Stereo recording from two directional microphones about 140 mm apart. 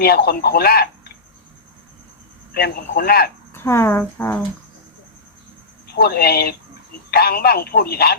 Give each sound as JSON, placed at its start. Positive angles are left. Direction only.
{"t": 0.0, "sound": "speech", "side_deg": 90}
{"t": 2.5, "sound": "speech", "side_deg": 90}
{"t": 3.5, "sound": "speech", "side_deg": 20}
{"t": 6.0, "sound": "speech", "side_deg": 90}